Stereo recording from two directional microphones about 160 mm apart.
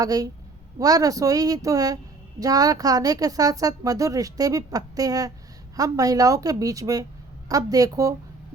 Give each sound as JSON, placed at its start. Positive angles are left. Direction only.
{"t": 0.0, "sound": "speech", "side_deg": -20}